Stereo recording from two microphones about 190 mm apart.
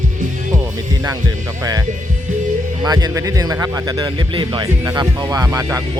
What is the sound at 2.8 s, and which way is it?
Speech, 20° right (ahead or behind).